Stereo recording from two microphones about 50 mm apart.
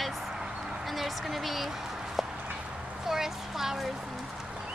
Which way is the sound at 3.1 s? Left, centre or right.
Centre.